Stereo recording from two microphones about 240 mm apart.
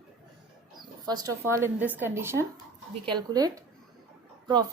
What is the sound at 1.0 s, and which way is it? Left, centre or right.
A woman's voice, centre.